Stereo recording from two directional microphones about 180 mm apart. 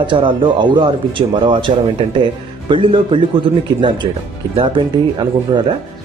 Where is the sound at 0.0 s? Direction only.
25° right (ahead or behind).